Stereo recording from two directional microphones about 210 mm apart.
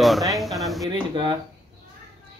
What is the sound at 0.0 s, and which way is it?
Speech, centre (ahead or behind).